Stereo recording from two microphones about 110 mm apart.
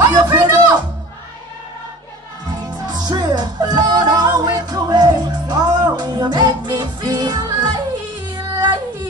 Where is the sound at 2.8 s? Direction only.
40° right (ahead or behind).